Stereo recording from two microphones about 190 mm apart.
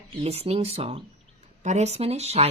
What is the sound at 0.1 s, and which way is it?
Speech, 35° right (ahead or behind).